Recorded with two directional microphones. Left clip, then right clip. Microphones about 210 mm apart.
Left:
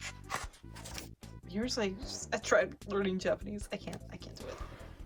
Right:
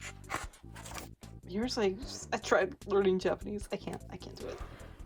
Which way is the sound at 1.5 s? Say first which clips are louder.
Right 3 dB; 15° right (ahead or behind).